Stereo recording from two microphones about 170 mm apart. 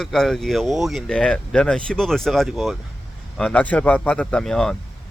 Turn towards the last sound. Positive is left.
turn(degrees=5)  # may be behind; listen again after turning